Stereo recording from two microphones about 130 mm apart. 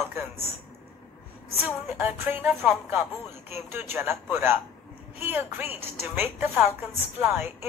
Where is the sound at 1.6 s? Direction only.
15° right (ahead or behind).